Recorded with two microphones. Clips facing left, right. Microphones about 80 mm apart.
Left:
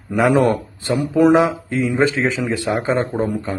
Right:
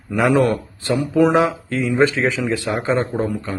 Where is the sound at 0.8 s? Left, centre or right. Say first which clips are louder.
Left 2 dB; centre.